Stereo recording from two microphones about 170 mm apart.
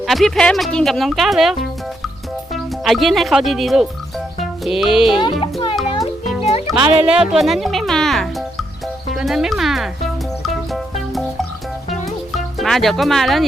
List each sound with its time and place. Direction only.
0.0 s speech: centre (ahead or behind)
5.4 s music: 30° left (ahead or behind)
5.7 s music: centre (ahead or behind)